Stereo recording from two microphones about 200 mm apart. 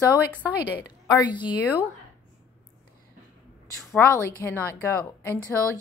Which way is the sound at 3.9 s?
10° left (ahead or behind).